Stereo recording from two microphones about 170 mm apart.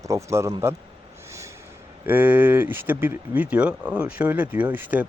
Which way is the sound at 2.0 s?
10° right (ahead or behind).